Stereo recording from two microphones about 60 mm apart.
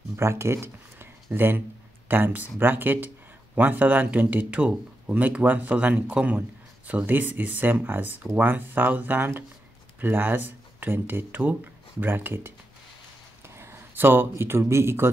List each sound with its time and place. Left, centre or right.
0.2 s speech: right
13.6 s speech: right